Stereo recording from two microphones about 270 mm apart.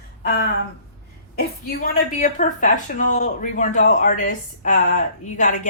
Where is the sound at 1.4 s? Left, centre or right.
Left.